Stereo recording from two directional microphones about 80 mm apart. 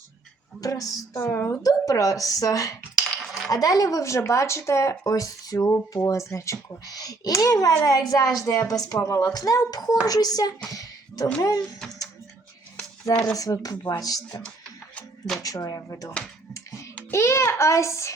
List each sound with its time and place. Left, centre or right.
0.6 s a woman's voice: left
1.1 s speech: left
1.6 s a woman's voice: left
10.7 s a sound: left
11.3 s a woman's voice: left
13.3 s a woman's voice: left
15.4 s a woman's voice: left